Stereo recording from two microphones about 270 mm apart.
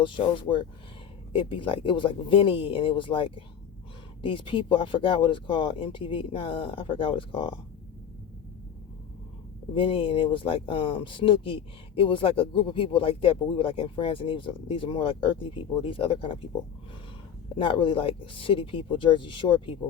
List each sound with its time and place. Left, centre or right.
0.0 s speech: centre
9.7 s speech: centre
17.6 s speech: centre